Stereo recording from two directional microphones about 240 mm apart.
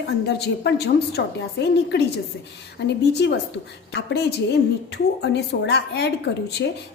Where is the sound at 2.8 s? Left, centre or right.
Left.